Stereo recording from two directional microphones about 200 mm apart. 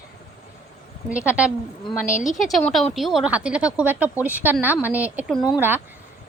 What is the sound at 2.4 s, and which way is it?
Speech, centre (ahead or behind).